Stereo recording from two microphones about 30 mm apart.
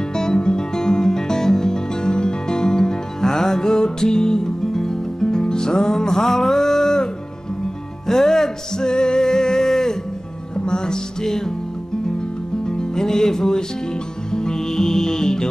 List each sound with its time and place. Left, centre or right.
0.1 s music: left
8.1 s music: centre
10.5 s music: left
12.6 s music: left